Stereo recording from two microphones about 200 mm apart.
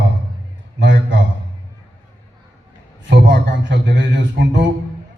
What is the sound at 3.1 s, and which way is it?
Speech, 65° right (ahead or behind).